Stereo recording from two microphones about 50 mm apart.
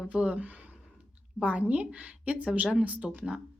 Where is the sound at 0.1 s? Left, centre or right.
Right.